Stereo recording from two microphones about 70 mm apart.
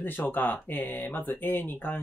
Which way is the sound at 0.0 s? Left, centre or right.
Left.